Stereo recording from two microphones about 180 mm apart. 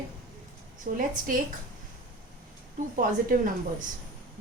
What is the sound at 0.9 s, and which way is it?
Speech, 50° right (ahead or behind).